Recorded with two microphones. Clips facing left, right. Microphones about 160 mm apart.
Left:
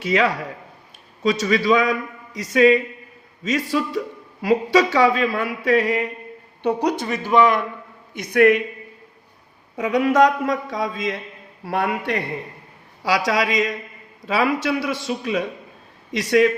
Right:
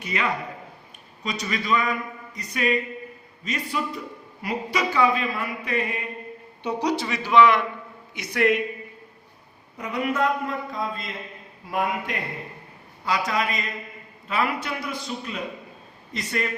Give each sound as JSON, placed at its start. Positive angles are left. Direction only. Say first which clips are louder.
{"t": 0.0, "sound": "speech", "louder": "left 7 dB", "side_deg": 90}
{"t": 6.6, "sound": "a man's voice", "louder": "left 4 dB", "side_deg": 60}
{"t": 9.7, "sound": "speech", "louder": "left 9 dB", "side_deg": 90}
{"t": 11.6, "sound": "a man's voice", "louder": "left 4 dB", "side_deg": 75}
{"t": 13.1, "sound": "a man's voice", "louder": "left 5 dB", "side_deg": 90}